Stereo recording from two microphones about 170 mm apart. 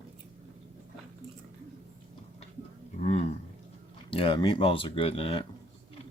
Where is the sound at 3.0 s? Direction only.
40° left (ahead or behind).